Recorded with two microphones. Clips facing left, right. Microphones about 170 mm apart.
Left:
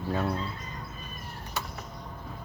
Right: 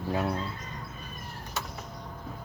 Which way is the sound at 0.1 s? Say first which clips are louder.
Even; 15° right (ahead or behind).